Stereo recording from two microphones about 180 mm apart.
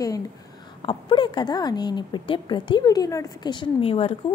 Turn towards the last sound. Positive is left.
turn(degrees=30)  # may be behind; listen again after turning